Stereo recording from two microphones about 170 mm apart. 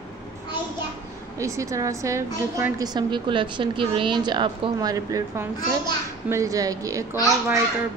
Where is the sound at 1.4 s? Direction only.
20° right (ahead or behind).